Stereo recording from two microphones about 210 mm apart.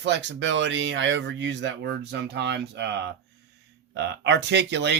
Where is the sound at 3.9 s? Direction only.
55° right (ahead or behind).